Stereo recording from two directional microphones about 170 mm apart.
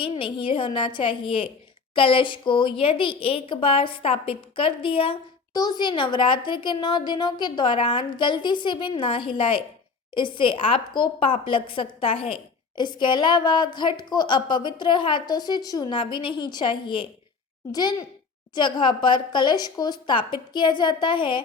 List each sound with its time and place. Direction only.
0.0 s speech: 30° left (ahead or behind)